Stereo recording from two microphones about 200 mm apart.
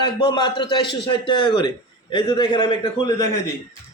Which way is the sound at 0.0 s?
20° left (ahead or behind).